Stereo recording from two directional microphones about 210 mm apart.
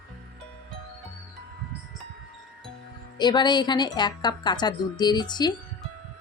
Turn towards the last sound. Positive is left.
turn(degrees=20)  # may be behind; listen again after turning